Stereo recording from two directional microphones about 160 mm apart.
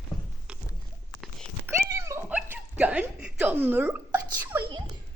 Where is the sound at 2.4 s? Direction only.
10° right (ahead or behind).